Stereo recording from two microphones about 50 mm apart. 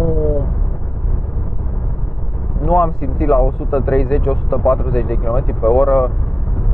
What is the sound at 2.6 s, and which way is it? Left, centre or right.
Speech, centre.